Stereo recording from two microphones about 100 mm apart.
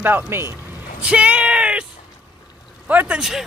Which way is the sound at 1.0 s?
10° right (ahead or behind).